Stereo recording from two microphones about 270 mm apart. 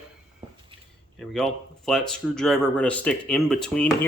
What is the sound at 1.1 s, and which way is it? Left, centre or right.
Speech, centre.